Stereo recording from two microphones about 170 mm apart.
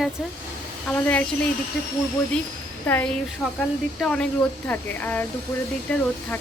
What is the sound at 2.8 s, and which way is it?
Speech, 10° left (ahead or behind).